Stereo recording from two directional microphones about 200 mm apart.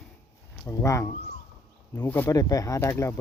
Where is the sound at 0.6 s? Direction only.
15° left (ahead or behind).